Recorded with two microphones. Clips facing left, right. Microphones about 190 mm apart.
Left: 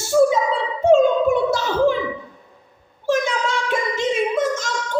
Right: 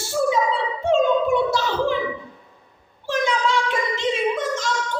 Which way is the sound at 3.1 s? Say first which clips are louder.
Left 2 dB; 45° left (ahead or behind).